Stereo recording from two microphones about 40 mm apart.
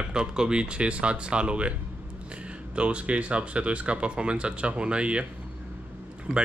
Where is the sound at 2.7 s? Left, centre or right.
Right.